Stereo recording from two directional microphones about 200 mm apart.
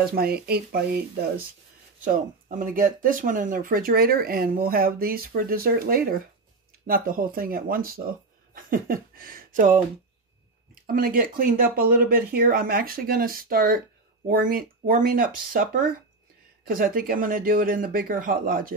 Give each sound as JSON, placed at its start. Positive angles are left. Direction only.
{"t": 0.1, "sound": "speech", "side_deg": -50}
{"t": 2.0, "sound": "speech", "side_deg": -40}